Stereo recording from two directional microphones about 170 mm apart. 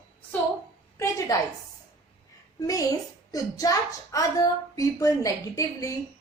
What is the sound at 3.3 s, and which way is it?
Speech, 20° left (ahead or behind).